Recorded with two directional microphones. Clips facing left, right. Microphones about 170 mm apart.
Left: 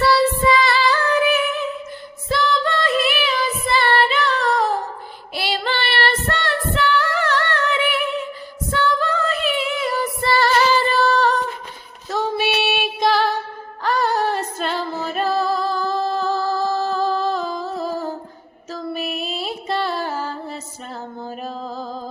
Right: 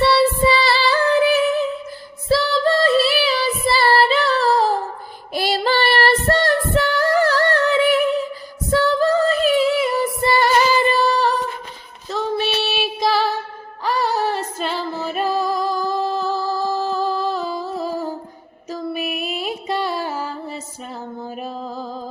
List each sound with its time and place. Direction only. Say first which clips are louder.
0.0 s music: right 1 dB; 30° right (ahead or behind)
2.3 s child singing: right 3 dB; 35° right (ahead or behind)
5.3 s female singing: right 5 dB; 40° right (ahead or behind); by 11.3 s 10° right (ahead or behind)
12.0 s female singing: even; 5° left (ahead or behind)
13.0 s music: left 1 dB; 5° right (ahead or behind)
19.1 s music: right 1 dB; 10° right (ahead or behind)